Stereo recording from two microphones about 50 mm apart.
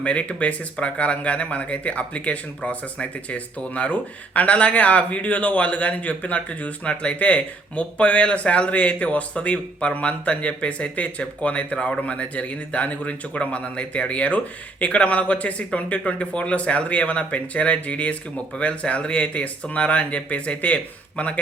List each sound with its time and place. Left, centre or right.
0.0 s speech: left